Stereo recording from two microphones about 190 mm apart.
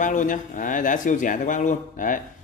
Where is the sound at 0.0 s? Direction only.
40° left (ahead or behind).